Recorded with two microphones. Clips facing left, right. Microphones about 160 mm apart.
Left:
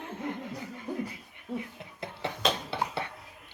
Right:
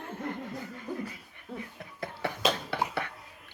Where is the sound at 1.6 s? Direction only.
20° left (ahead or behind).